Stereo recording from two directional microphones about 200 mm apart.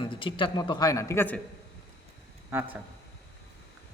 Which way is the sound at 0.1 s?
25° left (ahead or behind).